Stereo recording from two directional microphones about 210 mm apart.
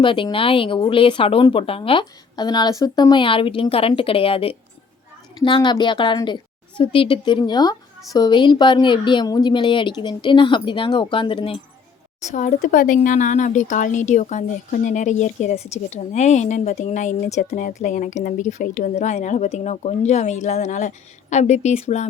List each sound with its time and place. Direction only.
0.0 s speech: 25° left (ahead or behind)
12.3 s a woman's voice: 35° left (ahead or behind)